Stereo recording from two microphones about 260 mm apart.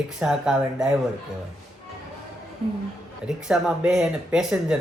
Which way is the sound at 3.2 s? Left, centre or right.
Centre.